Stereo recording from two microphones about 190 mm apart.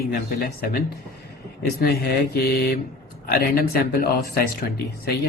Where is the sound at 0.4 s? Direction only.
50° left (ahead or behind).